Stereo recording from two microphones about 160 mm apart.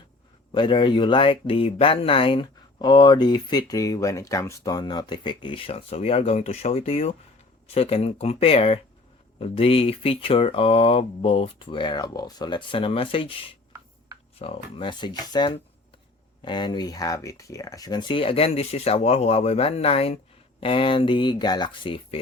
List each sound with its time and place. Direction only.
0.5 s speech: 30° left (ahead or behind)